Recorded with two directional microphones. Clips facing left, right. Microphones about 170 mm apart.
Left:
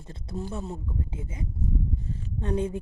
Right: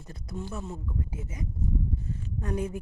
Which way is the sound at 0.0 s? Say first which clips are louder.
Left 3 dB; 25° left (ahead or behind).